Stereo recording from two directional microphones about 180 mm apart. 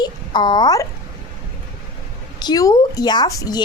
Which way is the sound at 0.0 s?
25° left (ahead or behind).